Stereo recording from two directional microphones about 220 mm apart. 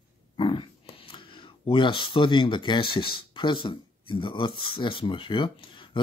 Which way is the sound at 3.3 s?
20° left (ahead or behind).